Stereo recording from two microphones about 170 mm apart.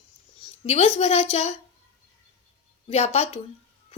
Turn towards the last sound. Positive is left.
turn(degrees=40)  # may be behind; listen again after turning